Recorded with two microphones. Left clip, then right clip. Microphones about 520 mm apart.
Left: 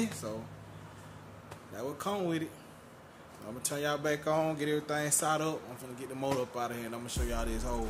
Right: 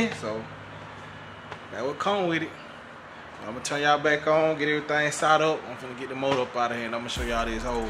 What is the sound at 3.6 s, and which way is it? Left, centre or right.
Speech, left.